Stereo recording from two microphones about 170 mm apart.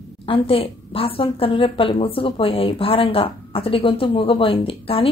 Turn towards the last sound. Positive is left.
turn(degrees=35)  # may be behind; listen again after turning